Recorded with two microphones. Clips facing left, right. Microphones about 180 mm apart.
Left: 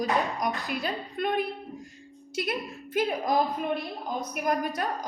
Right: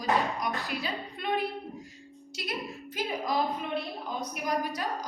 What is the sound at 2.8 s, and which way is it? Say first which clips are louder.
Speech: left 6 dB; 55° left (ahead or behind).